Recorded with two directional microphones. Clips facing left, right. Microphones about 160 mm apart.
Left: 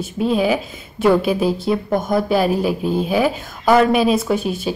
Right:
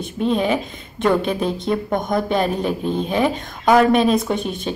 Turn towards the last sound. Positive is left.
turn(degrees=5)  # may be behind; listen again after turning